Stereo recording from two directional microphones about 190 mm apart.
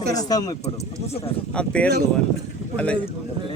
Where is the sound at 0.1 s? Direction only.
20° left (ahead or behind).